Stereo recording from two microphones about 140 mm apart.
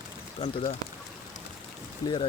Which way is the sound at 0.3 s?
45° left (ahead or behind).